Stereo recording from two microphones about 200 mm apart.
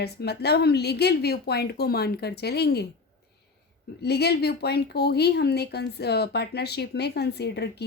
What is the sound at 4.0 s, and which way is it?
A woman's voice, 55° left (ahead or behind).